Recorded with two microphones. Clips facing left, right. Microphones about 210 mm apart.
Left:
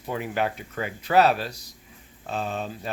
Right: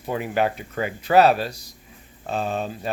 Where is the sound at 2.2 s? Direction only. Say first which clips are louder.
Right 4 dB; 45° right (ahead or behind).